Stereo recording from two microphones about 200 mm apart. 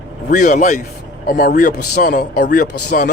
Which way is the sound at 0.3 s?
40° left (ahead or behind).